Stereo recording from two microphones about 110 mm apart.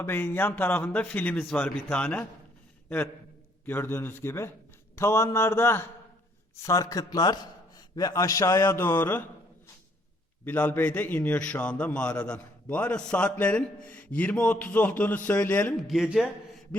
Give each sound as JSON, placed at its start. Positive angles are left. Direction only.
{"t": 0.0, "sound": "a man's voice", "side_deg": 20}
{"t": 3.7, "sound": "a man's voice", "side_deg": 20}
{"t": 10.4, "sound": "a man's voice", "side_deg": 15}
{"t": 15.9, "sound": "speech", "side_deg": -5}